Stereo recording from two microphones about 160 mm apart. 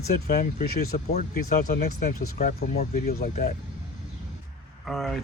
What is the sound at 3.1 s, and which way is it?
Speech, 70° left (ahead or behind).